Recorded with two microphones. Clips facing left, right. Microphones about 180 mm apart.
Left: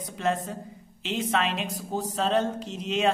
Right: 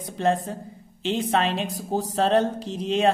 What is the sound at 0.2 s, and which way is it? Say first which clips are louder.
A man's voice: right 4 dB; 30° right (ahead or behind).